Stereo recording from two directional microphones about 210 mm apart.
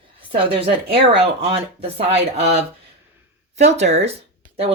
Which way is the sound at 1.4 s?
25° right (ahead or behind).